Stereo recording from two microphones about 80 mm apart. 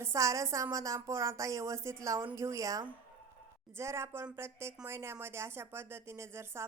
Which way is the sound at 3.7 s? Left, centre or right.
Right.